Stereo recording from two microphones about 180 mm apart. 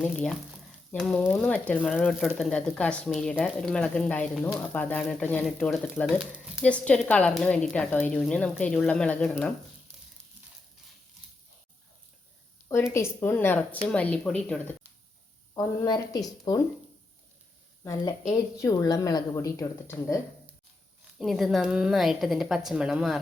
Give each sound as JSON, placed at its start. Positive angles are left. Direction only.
{"t": 0.0, "sound": "a woman's voice", "side_deg": 5}
{"t": 12.9, "sound": "speech", "side_deg": 15}
{"t": 15.5, "sound": "a woman's voice", "side_deg": 20}
{"t": 18.3, "sound": "a woman's voice", "side_deg": 20}
{"t": 21.2, "sound": "a woman's voice", "side_deg": 0}